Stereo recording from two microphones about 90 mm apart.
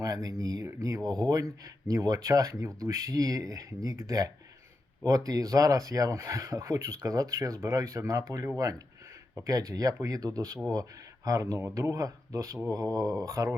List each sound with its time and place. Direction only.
0.0 s speech: 40° right (ahead or behind)